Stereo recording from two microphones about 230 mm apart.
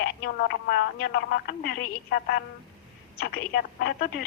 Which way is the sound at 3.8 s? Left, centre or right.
Left.